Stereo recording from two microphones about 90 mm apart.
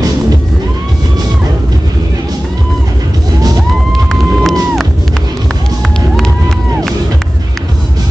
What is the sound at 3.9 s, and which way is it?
Music, centre (ahead or behind).